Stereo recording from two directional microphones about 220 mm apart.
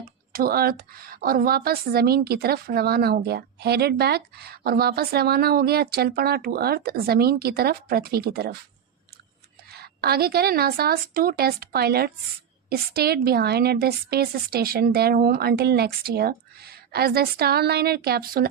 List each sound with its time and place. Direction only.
0.3 s a woman's voice: 45° right (ahead or behind)
9.7 s a woman's voice: 45° right (ahead or behind)